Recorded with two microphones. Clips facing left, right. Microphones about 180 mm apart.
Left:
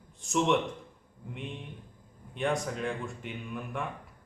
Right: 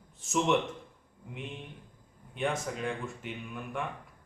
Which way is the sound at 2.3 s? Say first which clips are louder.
Left 2 dB; centre (ahead or behind).